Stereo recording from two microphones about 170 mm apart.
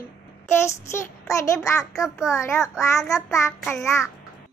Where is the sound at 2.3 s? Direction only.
15° left (ahead or behind).